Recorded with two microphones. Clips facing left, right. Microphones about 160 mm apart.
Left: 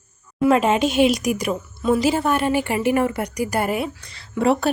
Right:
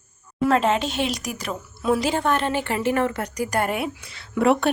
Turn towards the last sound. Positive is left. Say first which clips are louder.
# even
turn(degrees=0)  # may be behind; listen again after turning